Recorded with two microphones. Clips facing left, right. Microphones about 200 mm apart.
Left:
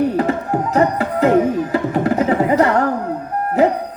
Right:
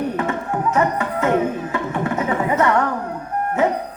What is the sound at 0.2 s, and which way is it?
Music, 35° left (ahead or behind).